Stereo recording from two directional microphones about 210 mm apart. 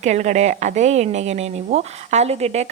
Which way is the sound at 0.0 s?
35° right (ahead or behind).